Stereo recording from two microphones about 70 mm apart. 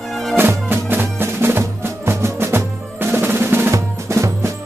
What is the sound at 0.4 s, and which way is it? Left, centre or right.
Music, right.